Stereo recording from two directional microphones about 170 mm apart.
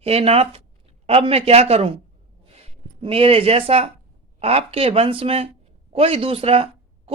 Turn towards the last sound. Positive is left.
turn(degrees=-35)  # may be behind; listen again after turning